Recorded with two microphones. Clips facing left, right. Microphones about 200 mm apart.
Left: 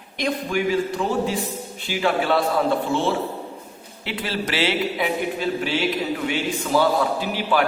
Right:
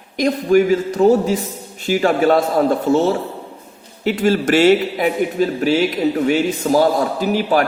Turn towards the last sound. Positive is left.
turn(degrees=-45)  # may be behind; listen again after turning